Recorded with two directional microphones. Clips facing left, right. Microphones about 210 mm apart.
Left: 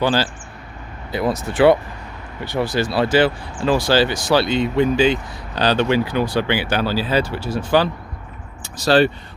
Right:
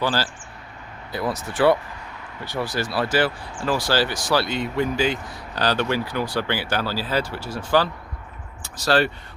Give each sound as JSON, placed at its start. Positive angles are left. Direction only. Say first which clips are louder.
{"t": 0.0, "sound": "speech", "louder": "left 5 dB", "side_deg": 20}